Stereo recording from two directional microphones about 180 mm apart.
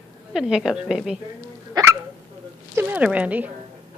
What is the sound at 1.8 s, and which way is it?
Hiccup, 20° right (ahead or behind).